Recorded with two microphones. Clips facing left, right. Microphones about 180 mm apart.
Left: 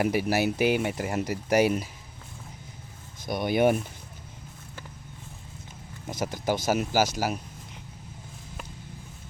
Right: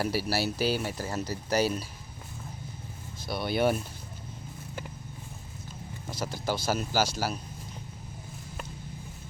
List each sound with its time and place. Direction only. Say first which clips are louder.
0.0 s speech: left 4 dB; 15° left (ahead or behind)
3.2 s speech: left 4 dB; 15° left (ahead or behind)
6.1 s speech: left 4 dB; 20° left (ahead or behind)